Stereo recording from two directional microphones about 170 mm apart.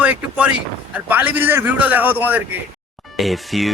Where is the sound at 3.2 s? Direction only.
Centre (ahead or behind).